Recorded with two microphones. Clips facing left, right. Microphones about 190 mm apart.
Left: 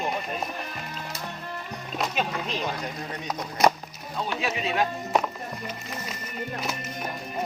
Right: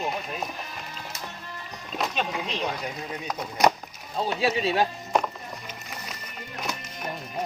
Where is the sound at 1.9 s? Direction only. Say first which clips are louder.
Even; centre (ahead or behind).